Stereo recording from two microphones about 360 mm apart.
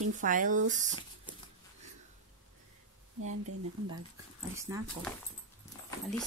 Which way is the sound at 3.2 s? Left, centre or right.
Right.